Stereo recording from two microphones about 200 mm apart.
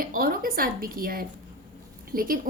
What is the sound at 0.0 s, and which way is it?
A woman's voice, 45° right (ahead or behind).